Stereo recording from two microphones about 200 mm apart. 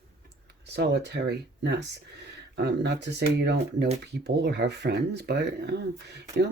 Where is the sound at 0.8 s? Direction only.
55° right (ahead or behind).